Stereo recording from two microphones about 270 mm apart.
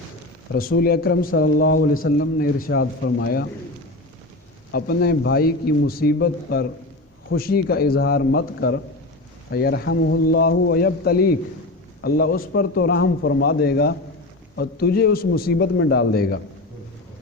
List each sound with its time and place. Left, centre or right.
0.8 s a man's voice: left
4.7 s a man's voice: left